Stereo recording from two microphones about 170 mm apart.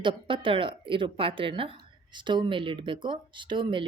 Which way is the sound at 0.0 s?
30° right (ahead or behind).